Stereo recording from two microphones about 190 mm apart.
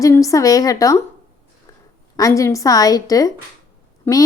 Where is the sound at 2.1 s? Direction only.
15° left (ahead or behind).